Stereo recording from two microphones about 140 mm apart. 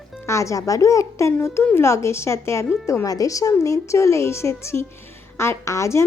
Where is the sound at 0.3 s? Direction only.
20° left (ahead or behind).